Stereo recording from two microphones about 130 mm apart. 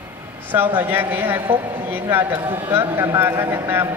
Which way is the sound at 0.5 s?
15° right (ahead or behind).